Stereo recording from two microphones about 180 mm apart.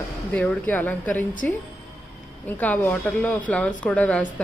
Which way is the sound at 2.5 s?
10° left (ahead or behind).